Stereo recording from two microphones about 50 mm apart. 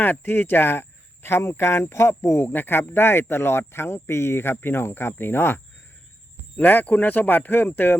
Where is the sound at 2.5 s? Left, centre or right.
Left.